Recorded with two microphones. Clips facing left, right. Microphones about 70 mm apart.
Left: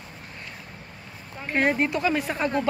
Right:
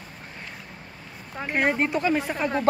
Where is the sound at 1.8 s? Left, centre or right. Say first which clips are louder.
Even; right.